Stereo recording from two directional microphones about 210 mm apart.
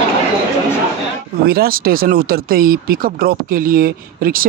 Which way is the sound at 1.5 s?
45° right (ahead or behind).